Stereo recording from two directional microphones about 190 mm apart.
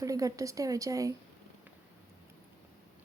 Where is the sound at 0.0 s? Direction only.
15° right (ahead or behind).